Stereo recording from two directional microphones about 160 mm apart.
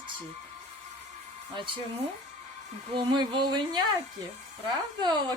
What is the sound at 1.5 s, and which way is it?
Speech, 30° right (ahead or behind).